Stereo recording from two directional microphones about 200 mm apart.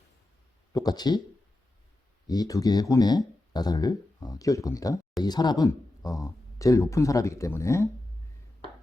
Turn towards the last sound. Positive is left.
turn(degrees=15)  # may be behind; listen again after turning